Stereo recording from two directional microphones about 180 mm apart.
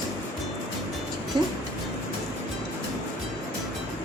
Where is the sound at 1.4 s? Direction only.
25° right (ahead or behind).